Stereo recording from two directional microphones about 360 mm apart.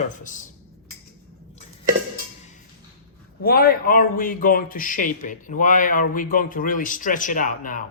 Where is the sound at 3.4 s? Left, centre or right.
Left.